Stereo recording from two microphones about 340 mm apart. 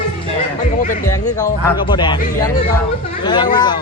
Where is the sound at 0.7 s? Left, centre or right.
Left.